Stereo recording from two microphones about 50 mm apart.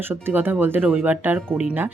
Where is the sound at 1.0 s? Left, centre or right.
Right.